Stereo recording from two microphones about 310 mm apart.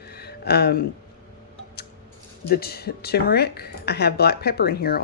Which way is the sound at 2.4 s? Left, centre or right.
Left.